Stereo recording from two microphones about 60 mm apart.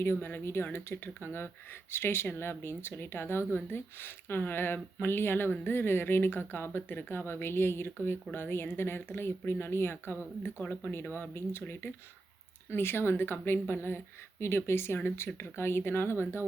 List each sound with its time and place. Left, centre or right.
0.0 s speech: left
12.7 s speech: left